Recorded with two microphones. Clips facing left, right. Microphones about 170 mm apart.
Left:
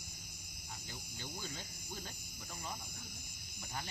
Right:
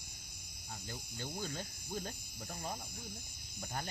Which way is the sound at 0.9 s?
50° right (ahead or behind).